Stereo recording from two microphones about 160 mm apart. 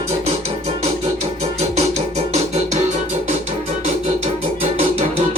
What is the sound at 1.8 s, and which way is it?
Music, 45° right (ahead or behind).